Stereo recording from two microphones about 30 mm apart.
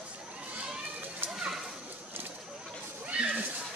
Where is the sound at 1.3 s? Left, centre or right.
Centre.